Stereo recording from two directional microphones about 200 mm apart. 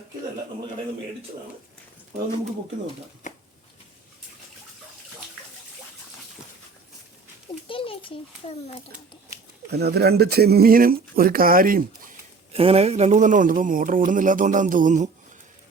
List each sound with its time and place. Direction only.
7.7 s a child's voice: 25° left (ahead or behind)
9.6 s speech: 55° right (ahead or behind)
12.5 s speech: 30° right (ahead or behind)